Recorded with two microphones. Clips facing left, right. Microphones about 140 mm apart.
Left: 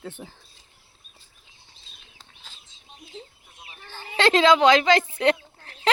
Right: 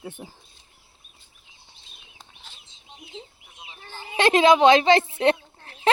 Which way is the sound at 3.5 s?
20° right (ahead or behind).